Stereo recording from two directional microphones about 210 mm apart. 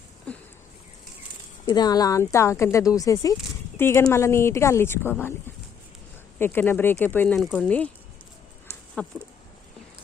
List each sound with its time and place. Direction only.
0.3 s a sound: 5° left (ahead or behind)
1.6 s speech: 20° left (ahead or behind)
6.4 s speech: 10° left (ahead or behind)
9.0 s speech: 5° left (ahead or behind)